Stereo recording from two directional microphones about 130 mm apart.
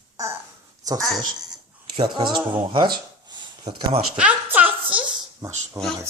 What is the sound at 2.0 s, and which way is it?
Speech, 35° right (ahead or behind).